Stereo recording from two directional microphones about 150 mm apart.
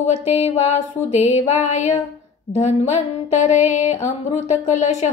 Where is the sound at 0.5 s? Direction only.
45° left (ahead or behind).